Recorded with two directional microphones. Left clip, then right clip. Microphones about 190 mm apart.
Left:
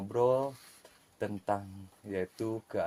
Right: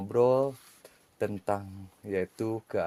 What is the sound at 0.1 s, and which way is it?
Speech, 60° right (ahead or behind).